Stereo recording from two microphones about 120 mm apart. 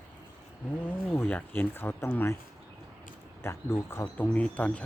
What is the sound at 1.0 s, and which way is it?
Speech, 20° left (ahead or behind).